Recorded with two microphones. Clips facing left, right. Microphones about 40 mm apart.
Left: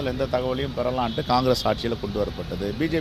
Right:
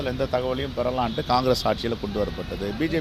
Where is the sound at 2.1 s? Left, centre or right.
Right.